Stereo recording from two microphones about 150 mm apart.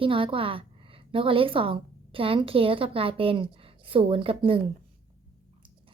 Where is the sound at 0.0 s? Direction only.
35° right (ahead or behind).